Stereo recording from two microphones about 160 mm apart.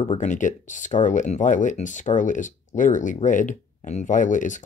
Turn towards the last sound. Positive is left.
turn(degrees=50)  # may be behind; listen again after turning